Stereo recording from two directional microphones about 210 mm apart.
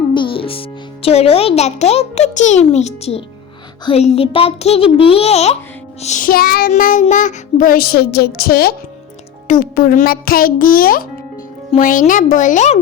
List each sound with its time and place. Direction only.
0.1 s a child's voice: 25° left (ahead or behind)
6.0 s child singing: 35° left (ahead or behind)
11.7 s a child's voice: 40° left (ahead or behind)